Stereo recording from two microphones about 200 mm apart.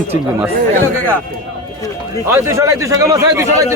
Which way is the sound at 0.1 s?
10° right (ahead or behind).